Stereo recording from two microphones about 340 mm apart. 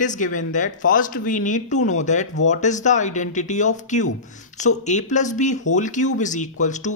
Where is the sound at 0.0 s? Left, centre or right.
Left.